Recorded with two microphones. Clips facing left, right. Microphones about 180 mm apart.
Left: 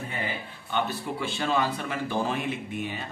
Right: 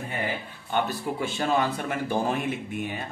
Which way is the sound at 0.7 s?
45° right (ahead or behind).